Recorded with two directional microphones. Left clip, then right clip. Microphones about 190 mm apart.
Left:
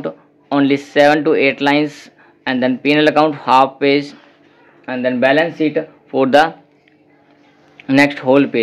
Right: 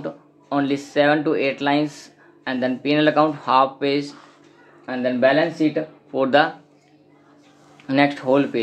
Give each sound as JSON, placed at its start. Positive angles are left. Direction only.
{"t": 0.0, "sound": "speech", "side_deg": 40}
{"t": 7.8, "sound": "speech", "side_deg": 40}